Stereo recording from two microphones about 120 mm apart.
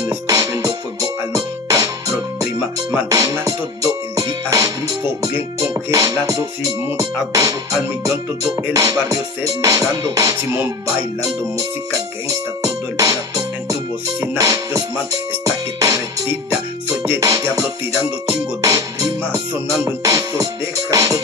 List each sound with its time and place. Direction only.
0.0 s music: 30° right (ahead or behind)
12.3 s music: 30° right (ahead or behind)
14.2 s music: 25° right (ahead or behind)
17.4 s music: 20° right (ahead or behind)